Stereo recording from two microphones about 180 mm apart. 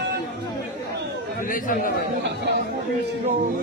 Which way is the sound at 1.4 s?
50° left (ahead or behind).